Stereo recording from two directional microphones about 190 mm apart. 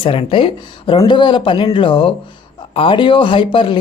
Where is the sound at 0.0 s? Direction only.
30° left (ahead or behind).